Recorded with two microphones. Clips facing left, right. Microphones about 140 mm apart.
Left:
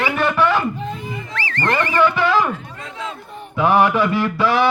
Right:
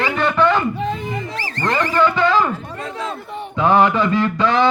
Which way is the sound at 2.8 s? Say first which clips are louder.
Right 4 dB; 40° right (ahead or behind).